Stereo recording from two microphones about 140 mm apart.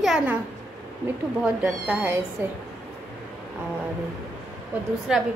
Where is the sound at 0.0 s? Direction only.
5° right (ahead or behind).